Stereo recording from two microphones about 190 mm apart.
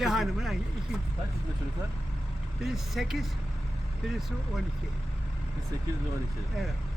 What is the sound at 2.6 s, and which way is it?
Speech, centre (ahead or behind).